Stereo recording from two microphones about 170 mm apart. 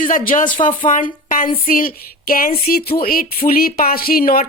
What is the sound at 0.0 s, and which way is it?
Speech, 50° left (ahead or behind).